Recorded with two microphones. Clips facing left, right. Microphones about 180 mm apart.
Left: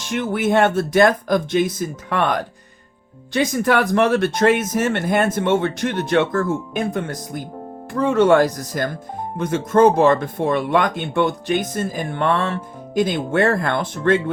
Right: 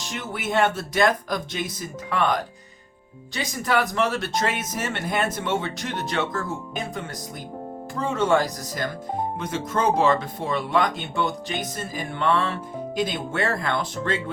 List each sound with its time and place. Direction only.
0.1 s speech: 55° left (ahead or behind)